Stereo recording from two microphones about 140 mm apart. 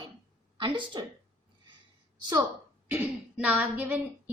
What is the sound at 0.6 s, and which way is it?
Speech, 35° right (ahead or behind).